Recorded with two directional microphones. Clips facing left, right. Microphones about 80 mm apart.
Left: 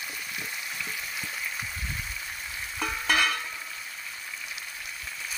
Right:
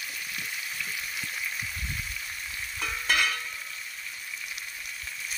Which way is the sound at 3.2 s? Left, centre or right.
Left.